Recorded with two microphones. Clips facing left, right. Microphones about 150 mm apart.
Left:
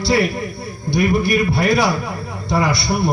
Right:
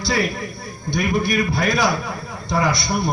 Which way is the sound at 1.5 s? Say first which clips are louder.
Left 3 dB; 30° left (ahead or behind).